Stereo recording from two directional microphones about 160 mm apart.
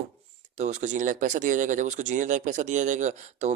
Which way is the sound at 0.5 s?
45° right (ahead or behind).